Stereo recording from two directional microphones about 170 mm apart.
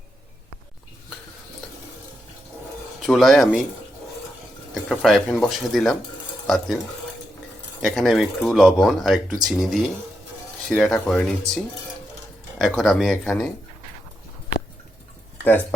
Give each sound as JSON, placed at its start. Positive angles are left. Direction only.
{"t": 3.1, "sound": "speech", "side_deg": 0}
{"t": 4.7, "sound": "speech", "side_deg": 0}
{"t": 7.8, "sound": "speech", "side_deg": 0}